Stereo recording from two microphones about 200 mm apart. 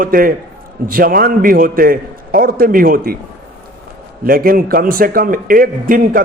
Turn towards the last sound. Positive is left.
turn(degrees=-45)  # may be behind; listen again after turning